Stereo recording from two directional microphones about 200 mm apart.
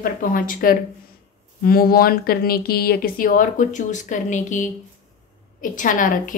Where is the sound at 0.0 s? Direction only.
45° left (ahead or behind).